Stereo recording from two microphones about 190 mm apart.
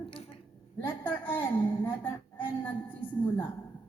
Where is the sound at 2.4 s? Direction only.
10° left (ahead or behind).